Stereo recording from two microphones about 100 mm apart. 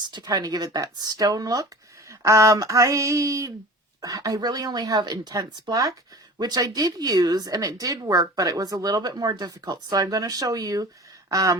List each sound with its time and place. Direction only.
0.0 s speech: 45° right (ahead or behind)